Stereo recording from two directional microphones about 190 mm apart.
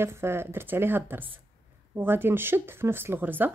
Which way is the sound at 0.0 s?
15° right (ahead or behind).